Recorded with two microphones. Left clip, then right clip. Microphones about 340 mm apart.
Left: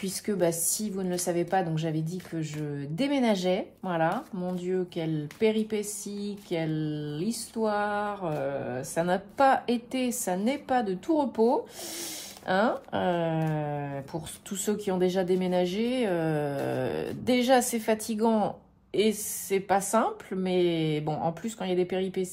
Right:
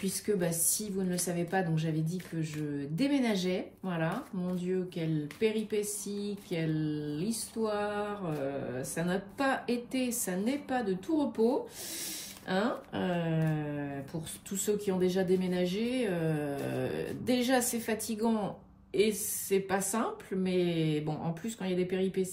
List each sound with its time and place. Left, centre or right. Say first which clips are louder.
0.0 s speech: left 4 dB; left
12.4 s speech: left 7 dB; left